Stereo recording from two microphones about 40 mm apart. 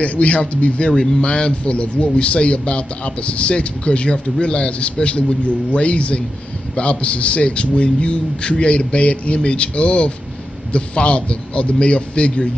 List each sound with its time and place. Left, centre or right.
0.0 s a man's voice: left